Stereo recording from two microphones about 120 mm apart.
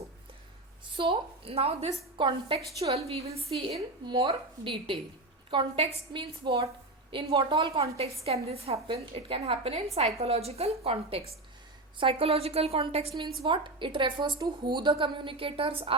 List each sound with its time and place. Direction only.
0.9 s a woman's voice: 45° right (ahead or behind)
13.4 s a woman's voice: 45° right (ahead or behind)